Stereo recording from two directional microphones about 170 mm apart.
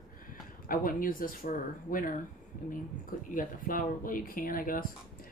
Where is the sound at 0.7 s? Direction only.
55° left (ahead or behind).